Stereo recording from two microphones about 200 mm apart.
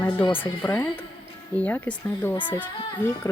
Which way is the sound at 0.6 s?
10° left (ahead or behind).